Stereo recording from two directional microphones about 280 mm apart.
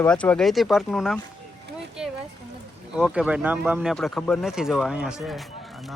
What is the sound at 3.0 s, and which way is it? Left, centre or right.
Speech, centre.